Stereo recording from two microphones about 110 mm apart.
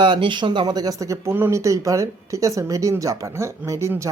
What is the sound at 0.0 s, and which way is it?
Speech, 45° right (ahead or behind).